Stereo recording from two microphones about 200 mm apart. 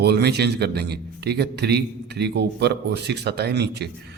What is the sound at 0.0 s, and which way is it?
A man's voice, 55° right (ahead or behind).